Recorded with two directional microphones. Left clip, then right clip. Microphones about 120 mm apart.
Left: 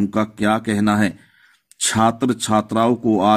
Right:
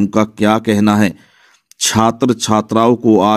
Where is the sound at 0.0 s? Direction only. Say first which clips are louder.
Right 6 dB; 30° right (ahead or behind).